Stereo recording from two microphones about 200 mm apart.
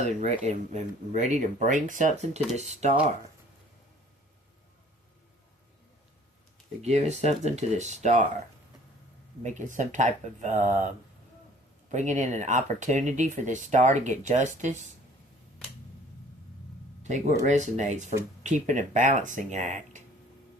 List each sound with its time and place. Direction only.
0.0 s speech: 35° right (ahead or behind)
6.8 s speech: 35° right (ahead or behind)
9.4 s speech: 40° right (ahead or behind)
17.4 s speech: 35° right (ahead or behind)